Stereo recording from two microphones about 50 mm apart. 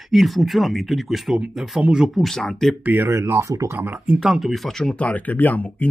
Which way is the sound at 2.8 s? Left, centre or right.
Right.